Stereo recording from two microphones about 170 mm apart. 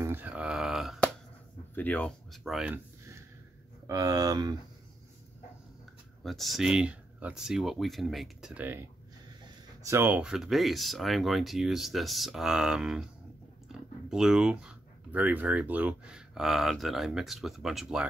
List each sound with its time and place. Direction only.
0.0 s a sound: 10° right (ahead or behind)
1.8 s speech: 10° left (ahead or behind)
3.8 s speech: 20° right (ahead or behind)
6.2 s speech: centre (ahead or behind)
9.8 s speech: 10° right (ahead or behind)